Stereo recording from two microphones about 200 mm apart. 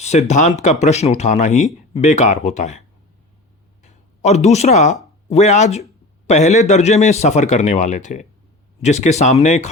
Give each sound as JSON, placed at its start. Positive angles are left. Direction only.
{"t": 0.0, "sound": "speech", "side_deg": 35}
{"t": 3.8, "sound": "speech", "side_deg": 35}